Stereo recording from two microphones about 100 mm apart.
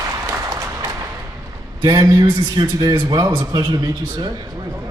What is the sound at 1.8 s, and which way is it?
A man's voice, 45° right (ahead or behind).